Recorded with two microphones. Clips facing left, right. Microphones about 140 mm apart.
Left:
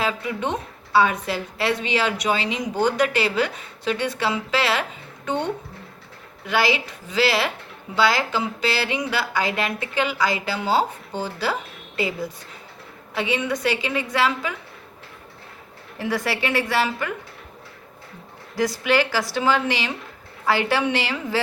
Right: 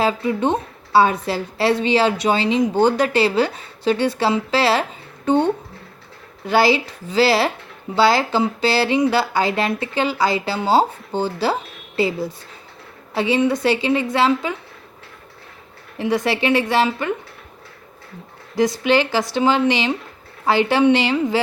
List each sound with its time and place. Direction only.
0.0 s a woman's voice: 30° right (ahead or behind)
16.0 s speech: 20° right (ahead or behind)
18.5 s speech: 20° right (ahead or behind)